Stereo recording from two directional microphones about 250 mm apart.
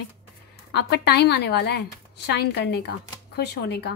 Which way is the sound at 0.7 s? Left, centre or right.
Left.